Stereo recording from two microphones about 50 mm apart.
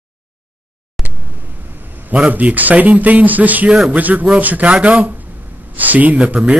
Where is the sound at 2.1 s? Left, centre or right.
Right.